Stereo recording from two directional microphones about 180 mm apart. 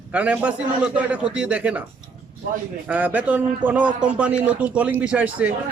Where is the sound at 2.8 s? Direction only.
10° right (ahead or behind).